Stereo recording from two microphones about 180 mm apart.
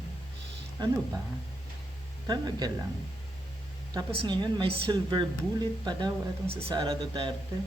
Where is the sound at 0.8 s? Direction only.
25° right (ahead or behind).